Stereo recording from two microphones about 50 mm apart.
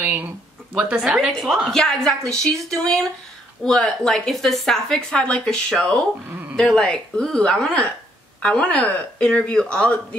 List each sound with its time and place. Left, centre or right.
0.0 s speech: right
0.7 s a woman's voice: centre
1.0 s a woman's voice: centre
1.7 s speech: centre